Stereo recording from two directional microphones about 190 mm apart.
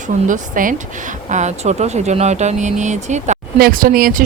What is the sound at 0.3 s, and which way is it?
Speech, 45° right (ahead or behind).